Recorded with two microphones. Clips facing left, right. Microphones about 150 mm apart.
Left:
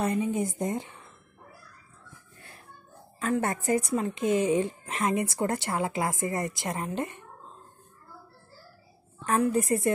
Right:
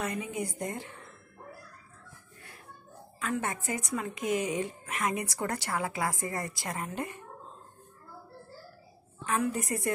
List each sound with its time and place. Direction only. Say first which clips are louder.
0.0 s speech: left 7 dB; 30° left (ahead or behind)
3.2 s speech: left 5 dB; 35° left (ahead or behind)
9.2 s a woman's voice: left 5 dB; 40° left (ahead or behind)
9.6 s speech: left 7 dB; 25° left (ahead or behind)